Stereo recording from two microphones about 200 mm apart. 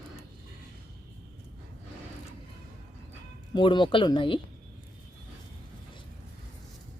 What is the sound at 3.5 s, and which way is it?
Speech, 25° left (ahead or behind).